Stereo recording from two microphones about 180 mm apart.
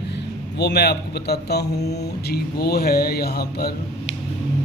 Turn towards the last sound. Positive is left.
turn(degrees=60)  # may be behind; listen again after turning